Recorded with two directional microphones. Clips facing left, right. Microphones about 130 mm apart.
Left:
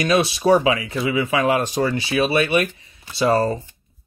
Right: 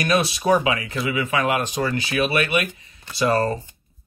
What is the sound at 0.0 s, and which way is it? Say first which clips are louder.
Speech: left 3 dB; 25° left (ahead or behind).